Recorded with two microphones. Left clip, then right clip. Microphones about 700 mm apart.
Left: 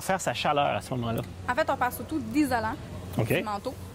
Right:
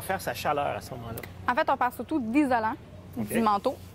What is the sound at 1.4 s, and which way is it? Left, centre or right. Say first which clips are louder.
A woman's voice: right 2 dB; right.